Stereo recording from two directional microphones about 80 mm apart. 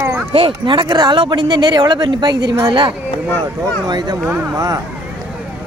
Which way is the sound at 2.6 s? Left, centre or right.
Right.